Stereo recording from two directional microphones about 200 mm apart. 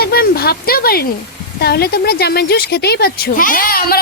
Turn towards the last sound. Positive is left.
turn(degrees=45)  # may be behind; listen again after turning